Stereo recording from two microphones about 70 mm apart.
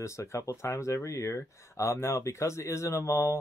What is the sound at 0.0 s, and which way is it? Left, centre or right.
Speech, left.